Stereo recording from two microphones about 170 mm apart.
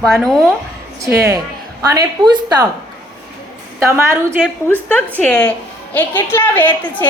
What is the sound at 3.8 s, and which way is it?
Speech, 15° right (ahead or behind).